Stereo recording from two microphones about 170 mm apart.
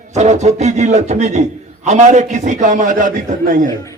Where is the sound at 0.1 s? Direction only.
40° right (ahead or behind).